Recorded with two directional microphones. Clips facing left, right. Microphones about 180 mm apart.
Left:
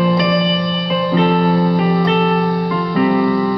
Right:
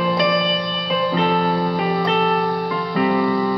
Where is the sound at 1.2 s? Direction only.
45° left (ahead or behind).